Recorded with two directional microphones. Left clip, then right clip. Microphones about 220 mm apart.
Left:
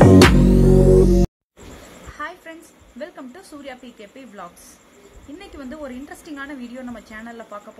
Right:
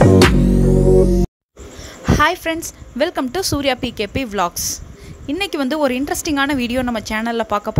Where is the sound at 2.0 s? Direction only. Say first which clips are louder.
Right 17 dB; 45° right (ahead or behind).